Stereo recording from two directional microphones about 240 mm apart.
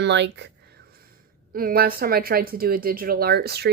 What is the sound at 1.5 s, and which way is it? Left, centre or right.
A woman's voice, right.